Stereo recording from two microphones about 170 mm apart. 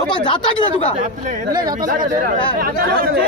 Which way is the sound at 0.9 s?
45° right (ahead or behind).